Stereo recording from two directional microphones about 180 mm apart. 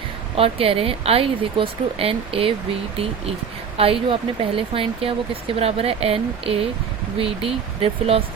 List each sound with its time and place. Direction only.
0.3 s speech: 30° right (ahead or behind)
3.8 s speech: 30° right (ahead or behind)